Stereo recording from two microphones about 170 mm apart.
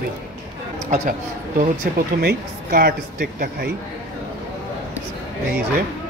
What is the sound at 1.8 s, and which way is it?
A man's voice, 60° right (ahead or behind).